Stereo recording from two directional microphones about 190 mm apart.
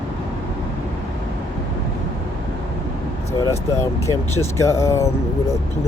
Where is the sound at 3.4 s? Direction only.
15° left (ahead or behind).